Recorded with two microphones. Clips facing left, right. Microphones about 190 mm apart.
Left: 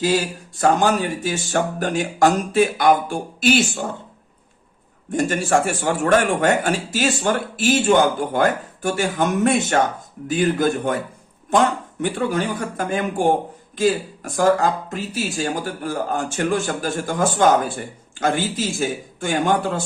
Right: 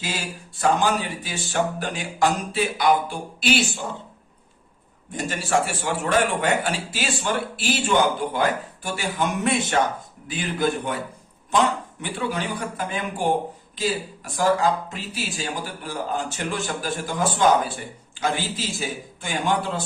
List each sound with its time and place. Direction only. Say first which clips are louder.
0.0 s a man's voice: left 11 dB; 40° left (ahead or behind)
5.1 s a man's voice: left 5 dB; 50° left (ahead or behind)
12.0 s a man's voice: left 6 dB; 45° left (ahead or behind)